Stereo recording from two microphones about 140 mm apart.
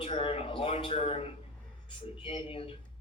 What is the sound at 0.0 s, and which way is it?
Speech, 40° left (ahead or behind).